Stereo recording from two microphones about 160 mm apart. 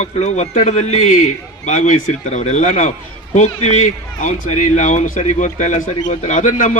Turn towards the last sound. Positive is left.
turn(degrees=55)  # may be behind; listen again after turning